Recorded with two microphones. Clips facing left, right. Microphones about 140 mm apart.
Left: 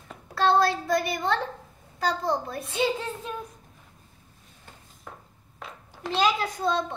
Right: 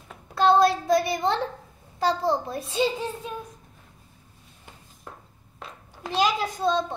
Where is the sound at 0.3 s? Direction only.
20° right (ahead or behind).